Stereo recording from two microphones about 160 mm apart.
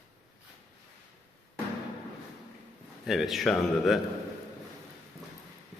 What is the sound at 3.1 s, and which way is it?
Speech, centre (ahead or behind).